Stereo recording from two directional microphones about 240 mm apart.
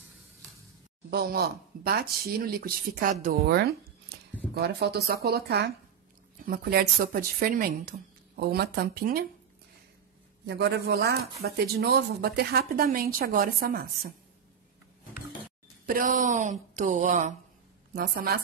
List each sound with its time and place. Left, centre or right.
1.1 s speech: right
10.4 s a man's voice: right
15.8 s speech: right